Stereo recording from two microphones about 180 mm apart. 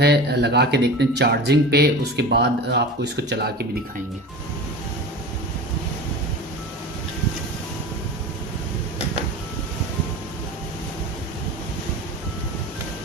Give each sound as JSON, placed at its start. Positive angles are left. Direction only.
{"t": 0.0, "sound": "speech", "side_deg": -65}